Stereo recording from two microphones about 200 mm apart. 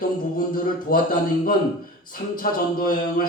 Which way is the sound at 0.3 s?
45° left (ahead or behind).